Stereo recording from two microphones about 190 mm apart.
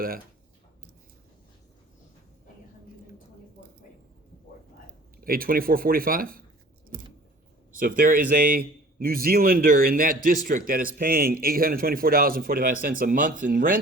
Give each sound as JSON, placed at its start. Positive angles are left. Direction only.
{"t": 5.2, "sound": "a man's voice", "side_deg": -50}
{"t": 7.8, "sound": "a man's voice", "side_deg": -45}